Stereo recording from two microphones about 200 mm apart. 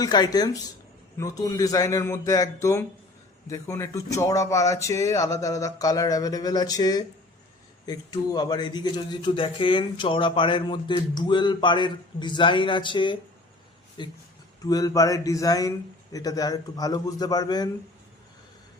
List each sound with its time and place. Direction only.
0.0 s speech: 20° left (ahead or behind)